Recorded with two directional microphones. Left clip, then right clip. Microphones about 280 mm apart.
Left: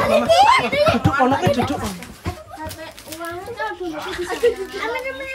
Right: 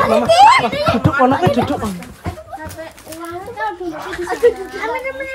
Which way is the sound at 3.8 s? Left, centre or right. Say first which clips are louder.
Right 2 dB; centre.